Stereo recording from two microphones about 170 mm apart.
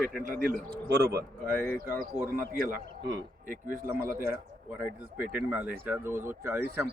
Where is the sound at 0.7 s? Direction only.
70° right (ahead or behind).